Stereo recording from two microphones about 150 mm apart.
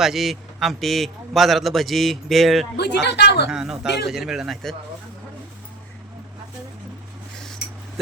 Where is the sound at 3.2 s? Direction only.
90° left.